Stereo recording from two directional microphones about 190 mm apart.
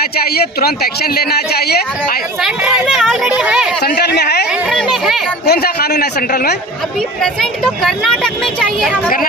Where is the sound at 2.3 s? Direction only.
5° right (ahead or behind).